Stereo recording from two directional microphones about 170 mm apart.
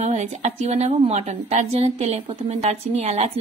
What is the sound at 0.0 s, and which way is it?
A woman's voice, 45° right (ahead or behind).